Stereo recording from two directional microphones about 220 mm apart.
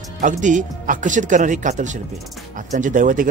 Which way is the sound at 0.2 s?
35° right (ahead or behind).